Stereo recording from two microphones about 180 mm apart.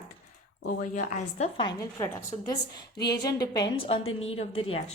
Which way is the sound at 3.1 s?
20° left (ahead or behind).